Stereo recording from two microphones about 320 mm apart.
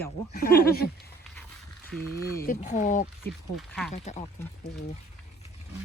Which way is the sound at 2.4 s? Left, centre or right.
Left.